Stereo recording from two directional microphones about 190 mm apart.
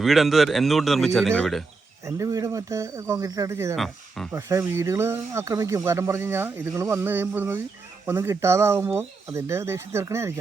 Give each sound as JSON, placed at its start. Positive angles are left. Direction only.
{"t": 0.0, "sound": "speech", "side_deg": 0}
{"t": 2.0, "sound": "speech", "side_deg": -15}
{"t": 3.8, "sound": "speech", "side_deg": 0}
{"t": 4.3, "sound": "speech", "side_deg": -15}